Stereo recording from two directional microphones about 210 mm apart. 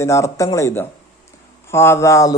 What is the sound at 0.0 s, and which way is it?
Speech, 15° left (ahead or behind).